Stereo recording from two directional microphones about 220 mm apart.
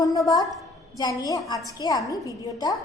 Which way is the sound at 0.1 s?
15° left (ahead or behind).